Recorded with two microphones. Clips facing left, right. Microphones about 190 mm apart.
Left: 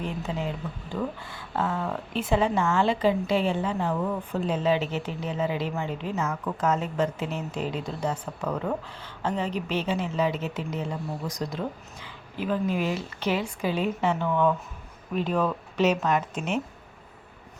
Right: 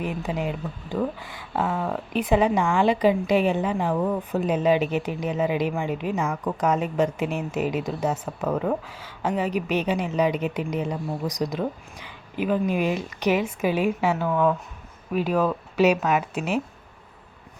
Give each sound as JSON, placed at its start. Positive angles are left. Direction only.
{"t": 0.0, "sound": "a woman's voice", "side_deg": -15}